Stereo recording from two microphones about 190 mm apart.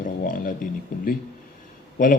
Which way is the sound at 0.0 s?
45° left (ahead or behind).